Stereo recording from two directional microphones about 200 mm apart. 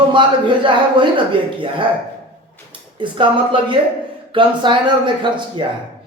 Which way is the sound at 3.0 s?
25° right (ahead or behind).